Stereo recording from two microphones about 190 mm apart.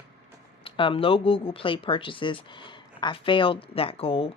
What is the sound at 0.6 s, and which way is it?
Speech, 30° left (ahead or behind).